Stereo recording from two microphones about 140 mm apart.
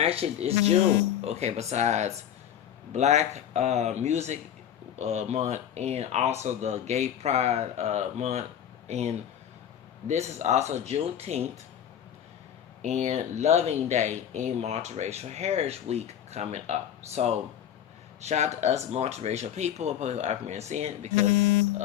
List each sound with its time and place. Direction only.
0.0 s speech: 45° right (ahead or behind)
12.8 s speech: 55° right (ahead or behind)